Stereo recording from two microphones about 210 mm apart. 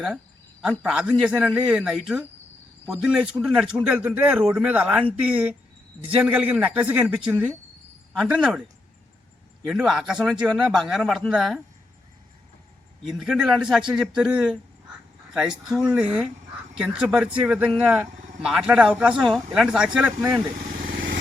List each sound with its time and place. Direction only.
0.6 s speech: 5° right (ahead or behind)
9.6 s speech: centre (ahead or behind)
13.1 s speech: centre (ahead or behind)